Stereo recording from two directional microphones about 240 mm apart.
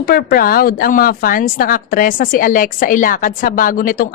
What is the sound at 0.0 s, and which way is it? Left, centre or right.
Speech, left.